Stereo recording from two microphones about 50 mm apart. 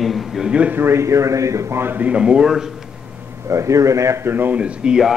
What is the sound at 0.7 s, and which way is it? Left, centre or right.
Speech, right.